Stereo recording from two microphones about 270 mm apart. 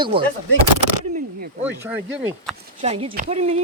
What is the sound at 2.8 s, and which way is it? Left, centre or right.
Speech, right.